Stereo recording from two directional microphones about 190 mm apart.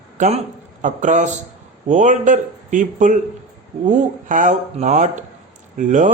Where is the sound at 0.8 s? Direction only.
40° right (ahead or behind).